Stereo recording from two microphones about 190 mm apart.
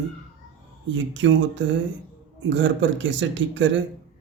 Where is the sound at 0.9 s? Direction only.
80° right.